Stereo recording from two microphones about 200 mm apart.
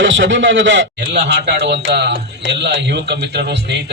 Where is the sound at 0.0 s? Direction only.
65° right (ahead or behind).